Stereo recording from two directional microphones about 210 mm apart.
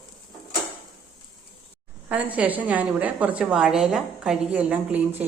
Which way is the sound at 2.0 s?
5° right (ahead or behind).